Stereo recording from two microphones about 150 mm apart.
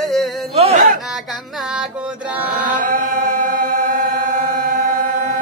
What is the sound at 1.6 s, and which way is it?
Music, centre (ahead or behind).